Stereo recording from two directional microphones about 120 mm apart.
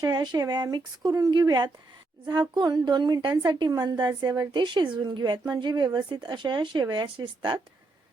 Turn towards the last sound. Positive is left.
turn(degrees=-40)  # may be behind; listen again after turning